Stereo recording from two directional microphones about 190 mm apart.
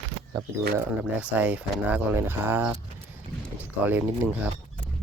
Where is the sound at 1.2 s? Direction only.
10° right (ahead or behind).